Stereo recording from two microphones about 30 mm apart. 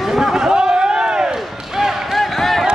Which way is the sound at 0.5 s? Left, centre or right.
Right.